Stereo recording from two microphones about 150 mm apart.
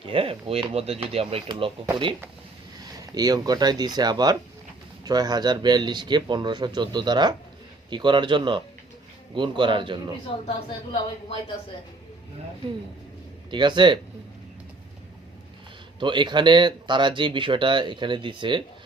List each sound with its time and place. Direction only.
0.0 s speech: 35° right (ahead or behind)
3.0 s speech: 25° right (ahead or behind)
10.2 s a woman's voice: 35° left (ahead or behind)
13.5 s speech: 30° right (ahead or behind)
16.0 s speech: 30° right (ahead or behind)